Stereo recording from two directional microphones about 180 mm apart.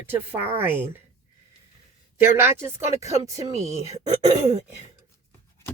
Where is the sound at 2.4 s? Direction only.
15° right (ahead or behind).